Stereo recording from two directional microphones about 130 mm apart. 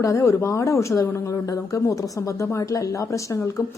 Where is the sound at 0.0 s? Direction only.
25° left (ahead or behind).